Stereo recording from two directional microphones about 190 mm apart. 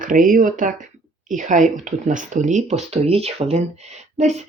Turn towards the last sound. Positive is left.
turn(degrees=-35)  # may be behind; listen again after turning